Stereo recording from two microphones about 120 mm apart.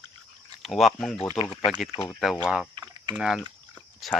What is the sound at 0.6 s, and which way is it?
Speech, centre (ahead or behind).